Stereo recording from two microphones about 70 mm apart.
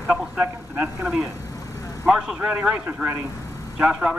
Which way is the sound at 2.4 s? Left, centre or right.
Right.